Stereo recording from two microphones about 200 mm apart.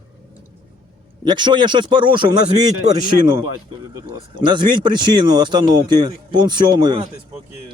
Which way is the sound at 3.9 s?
20° right (ahead or behind).